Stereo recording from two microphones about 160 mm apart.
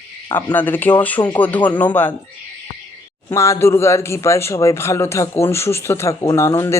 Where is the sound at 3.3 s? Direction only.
15° left (ahead or behind).